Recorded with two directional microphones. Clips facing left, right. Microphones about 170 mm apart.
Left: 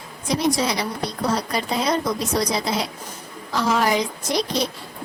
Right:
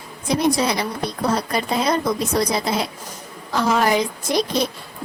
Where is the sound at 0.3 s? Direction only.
55° right (ahead or behind).